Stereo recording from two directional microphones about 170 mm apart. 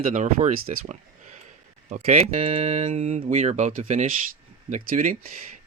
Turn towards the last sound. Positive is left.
turn(degrees=-50)  # may be behind; listen again after turning